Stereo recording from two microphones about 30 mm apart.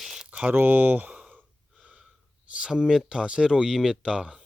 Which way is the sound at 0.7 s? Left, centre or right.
Right.